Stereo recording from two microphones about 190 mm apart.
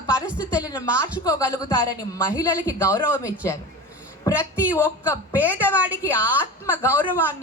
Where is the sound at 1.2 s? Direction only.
15° left (ahead or behind).